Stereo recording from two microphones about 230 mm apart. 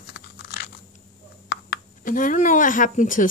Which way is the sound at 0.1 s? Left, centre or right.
Left.